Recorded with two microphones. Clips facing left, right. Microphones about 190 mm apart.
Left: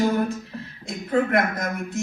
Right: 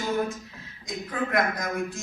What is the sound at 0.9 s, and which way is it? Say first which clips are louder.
Speech: left 9 dB; 55° left (ahead or behind).